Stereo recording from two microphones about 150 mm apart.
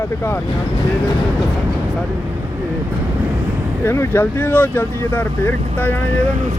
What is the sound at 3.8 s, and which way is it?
Speech, 15° left (ahead or behind).